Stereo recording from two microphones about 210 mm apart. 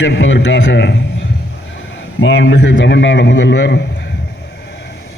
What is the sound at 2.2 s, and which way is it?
A man's voice, 60° left (ahead or behind).